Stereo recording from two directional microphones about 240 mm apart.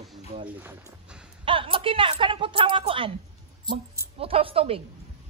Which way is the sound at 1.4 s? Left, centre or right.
Right.